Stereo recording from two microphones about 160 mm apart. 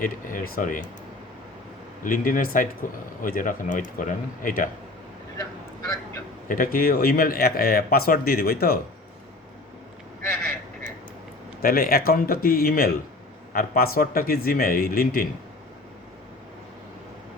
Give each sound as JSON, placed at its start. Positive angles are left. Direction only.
{"t": 0.0, "sound": "a man's voice", "side_deg": 60}
{"t": 2.0, "sound": "a man's voice", "side_deg": 55}
{"t": 6.5, "sound": "speech", "side_deg": 60}
{"t": 11.6, "sound": "a man's voice", "side_deg": 65}